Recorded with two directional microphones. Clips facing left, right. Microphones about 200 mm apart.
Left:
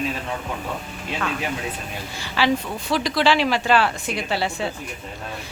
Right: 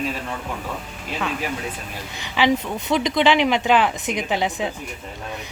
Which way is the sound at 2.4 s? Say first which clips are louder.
Right 2 dB; 15° right (ahead or behind).